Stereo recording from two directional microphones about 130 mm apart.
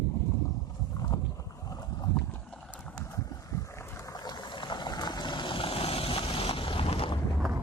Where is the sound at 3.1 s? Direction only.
25° left (ahead or behind).